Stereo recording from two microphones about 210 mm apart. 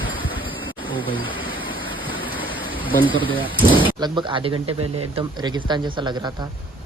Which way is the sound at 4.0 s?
20° right (ahead or behind).